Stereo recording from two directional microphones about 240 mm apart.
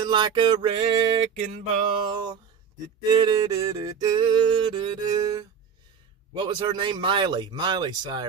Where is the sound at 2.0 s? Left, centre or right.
Centre.